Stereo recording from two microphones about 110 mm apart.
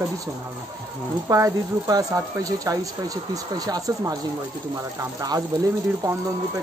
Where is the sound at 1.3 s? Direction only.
30° right (ahead or behind).